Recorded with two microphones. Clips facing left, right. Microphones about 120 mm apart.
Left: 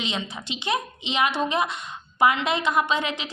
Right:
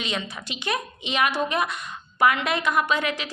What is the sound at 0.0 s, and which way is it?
A woman's voice, 20° left (ahead or behind).